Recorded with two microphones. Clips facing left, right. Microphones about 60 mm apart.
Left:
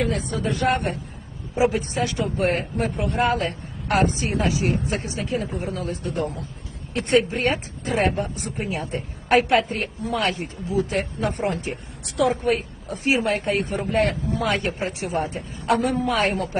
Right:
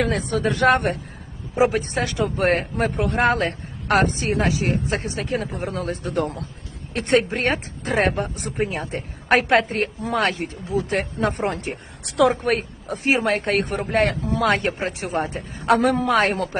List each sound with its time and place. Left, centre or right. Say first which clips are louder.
0.0 s a woman's voice: right 3 dB; right
15.6 s speech: right 3 dB; right